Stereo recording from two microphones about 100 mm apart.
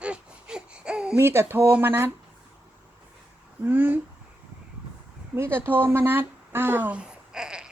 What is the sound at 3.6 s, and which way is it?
Speech, 20° right (ahead or behind).